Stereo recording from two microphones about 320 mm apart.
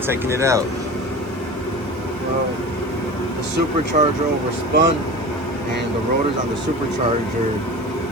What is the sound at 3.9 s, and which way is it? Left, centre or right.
Speech, right.